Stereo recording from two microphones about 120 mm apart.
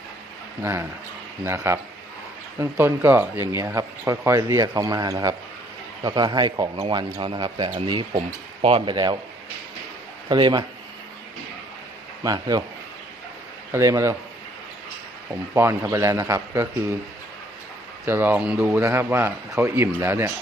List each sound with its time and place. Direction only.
0.6 s speech: 20° right (ahead or behind)
6.8 s speech: 45° right (ahead or behind)
8.6 s speech: 50° right (ahead or behind)
10.2 s speech: 40° right (ahead or behind)
12.2 s speech: 30° right (ahead or behind)
13.7 s speech: 25° right (ahead or behind)
15.5 s speech: 20° right (ahead or behind)
18.0 s speech: 15° right (ahead or behind)